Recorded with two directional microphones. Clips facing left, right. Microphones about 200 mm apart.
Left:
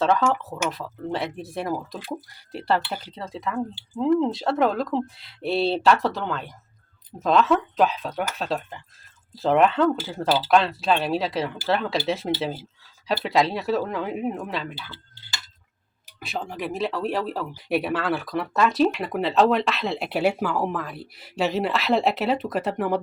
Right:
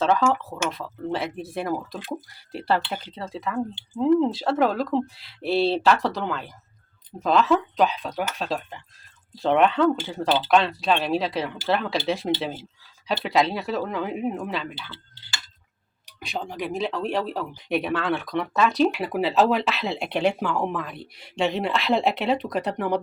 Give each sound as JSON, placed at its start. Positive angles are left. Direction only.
{"t": 0.0, "sound": "speech", "side_deg": 0}
{"t": 16.0, "sound": "speech", "side_deg": 0}